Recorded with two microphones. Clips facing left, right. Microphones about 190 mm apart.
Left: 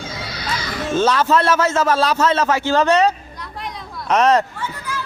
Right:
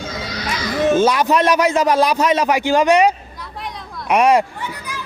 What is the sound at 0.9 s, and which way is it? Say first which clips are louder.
Speech: left 2 dB; 15° right (ahead or behind).